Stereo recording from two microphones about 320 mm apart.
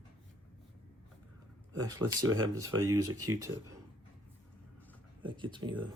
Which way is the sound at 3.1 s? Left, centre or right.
Right.